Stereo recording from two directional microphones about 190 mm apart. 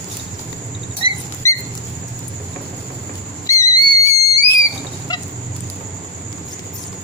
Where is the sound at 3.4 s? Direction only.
15° left (ahead or behind).